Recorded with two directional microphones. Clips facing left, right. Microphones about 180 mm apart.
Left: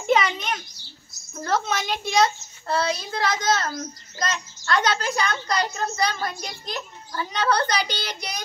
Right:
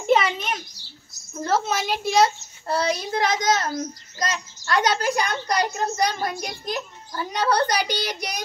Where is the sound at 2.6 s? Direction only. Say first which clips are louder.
Right 1 dB; 15° right (ahead or behind).